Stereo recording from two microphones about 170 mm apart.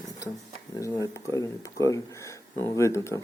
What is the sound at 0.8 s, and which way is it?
Speech, 20° left (ahead or behind).